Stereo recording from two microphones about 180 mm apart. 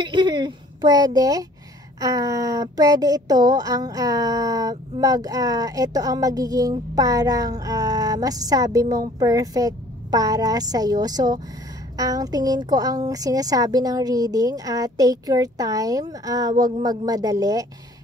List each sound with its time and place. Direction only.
0.0 s a child's voice: 25° right (ahead or behind)